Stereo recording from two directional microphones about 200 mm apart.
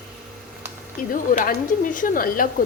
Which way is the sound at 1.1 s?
40° left (ahead or behind).